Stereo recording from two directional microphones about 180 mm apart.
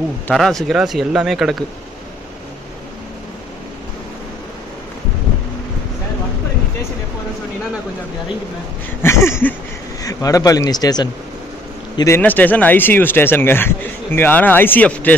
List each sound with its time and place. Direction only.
0.3 s speech: centre (ahead or behind)
9.0 s a sound: 15° left (ahead or behind)
10.0 s a man's voice: 20° left (ahead or behind)